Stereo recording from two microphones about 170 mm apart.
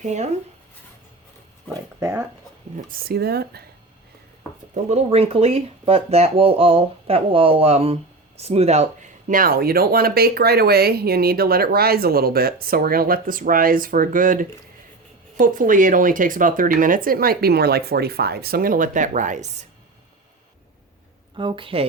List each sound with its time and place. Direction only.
0.0 s speech: 45° right (ahead or behind)
2.0 s speech: 15° right (ahead or behind)
3.0 s speech: 70° right (ahead or behind)
4.7 s speech: 40° right (ahead or behind)
21.3 s a woman's voice: 30° right (ahead or behind)